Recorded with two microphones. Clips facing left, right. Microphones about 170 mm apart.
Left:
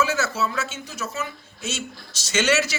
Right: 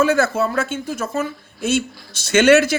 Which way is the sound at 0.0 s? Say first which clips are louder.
Right 7 dB; 55° right (ahead or behind).